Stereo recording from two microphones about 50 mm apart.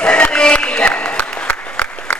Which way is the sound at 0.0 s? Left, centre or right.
Left.